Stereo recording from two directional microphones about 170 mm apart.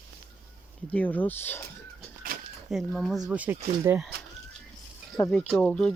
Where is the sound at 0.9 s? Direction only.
10° left (ahead or behind).